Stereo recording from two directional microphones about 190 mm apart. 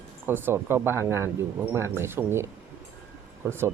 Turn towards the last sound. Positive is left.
turn(degrees=-15)  # may be behind; listen again after turning